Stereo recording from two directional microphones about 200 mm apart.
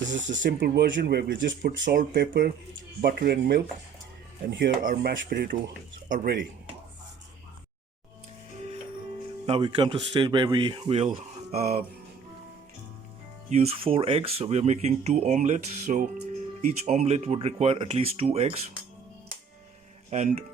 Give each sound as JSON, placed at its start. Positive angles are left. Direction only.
{"t": 0.4, "sound": "speech", "side_deg": -60}
{"t": 1.8, "sound": "speech", "side_deg": -40}
{"t": 2.1, "sound": "speech", "side_deg": -55}
{"t": 4.8, "sound": "speech", "side_deg": -45}
{"t": 5.3, "sound": "speech", "side_deg": -55}
{"t": 9.5, "sound": "speech", "side_deg": -25}
{"t": 13.5, "sound": "speech", "side_deg": -30}
{"t": 20.1, "sound": "speech", "side_deg": -35}